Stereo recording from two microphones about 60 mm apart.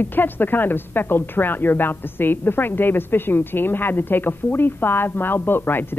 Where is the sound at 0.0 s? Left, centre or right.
Left.